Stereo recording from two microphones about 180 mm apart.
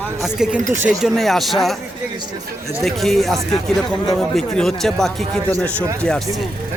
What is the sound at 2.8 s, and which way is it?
Speech, centre (ahead or behind).